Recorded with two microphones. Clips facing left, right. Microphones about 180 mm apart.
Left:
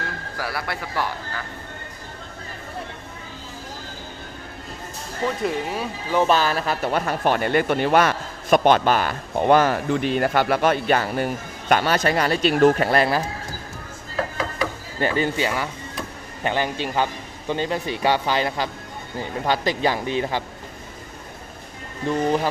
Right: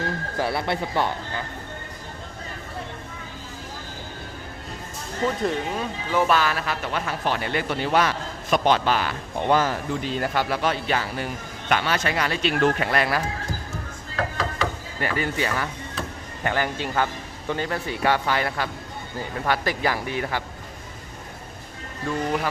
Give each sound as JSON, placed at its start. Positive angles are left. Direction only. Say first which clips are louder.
{"t": 0.3, "sound": "speech", "louder": "right 4 dB", "side_deg": -25}
{"t": 5.4, "sound": "speech", "louder": "left 1 dB", "side_deg": 5}
{"t": 6.2, "sound": "speech", "louder": "left 4 dB", "side_deg": 30}
{"t": 15.0, "sound": "speech", "louder": "left 4 dB", "side_deg": 25}
{"t": 22.0, "sound": "speech", "louder": "left 4 dB", "side_deg": 25}